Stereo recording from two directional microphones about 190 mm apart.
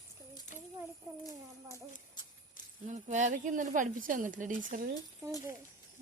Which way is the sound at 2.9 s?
40° right (ahead or behind).